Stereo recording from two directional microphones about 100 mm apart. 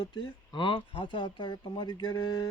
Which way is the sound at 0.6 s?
55° left (ahead or behind).